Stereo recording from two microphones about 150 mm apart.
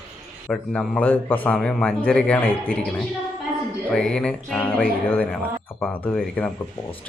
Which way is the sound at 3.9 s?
5° left (ahead or behind).